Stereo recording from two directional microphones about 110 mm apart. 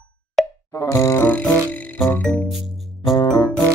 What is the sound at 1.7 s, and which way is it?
Music, 15° left (ahead or behind).